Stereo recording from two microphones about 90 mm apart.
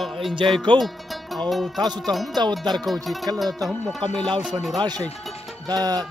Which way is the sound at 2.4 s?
55° right (ahead or behind).